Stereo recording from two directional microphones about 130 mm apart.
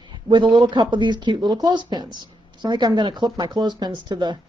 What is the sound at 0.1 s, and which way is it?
A man's voice, 35° right (ahead or behind).